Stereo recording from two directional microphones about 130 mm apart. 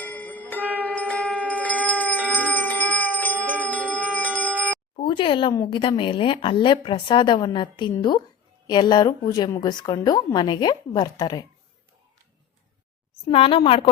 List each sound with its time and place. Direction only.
0.0 s bell: 15° left (ahead or behind)
0.8 s music: 10° left (ahead or behind)
3.6 s a sound: 10° left (ahead or behind)
4.9 s speech: 40° left (ahead or behind)
13.2 s speech: 45° left (ahead or behind)